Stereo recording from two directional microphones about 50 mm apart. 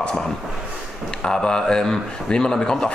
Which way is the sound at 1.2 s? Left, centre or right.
Centre.